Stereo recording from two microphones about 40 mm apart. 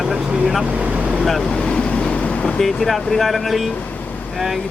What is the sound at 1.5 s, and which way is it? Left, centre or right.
Vehicle, left.